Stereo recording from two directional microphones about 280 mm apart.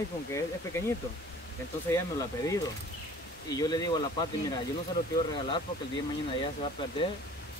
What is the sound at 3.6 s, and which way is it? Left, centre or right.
Speech, centre.